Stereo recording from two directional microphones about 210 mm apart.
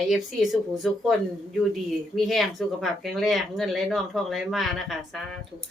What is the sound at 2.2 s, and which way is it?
Speech, centre (ahead or behind).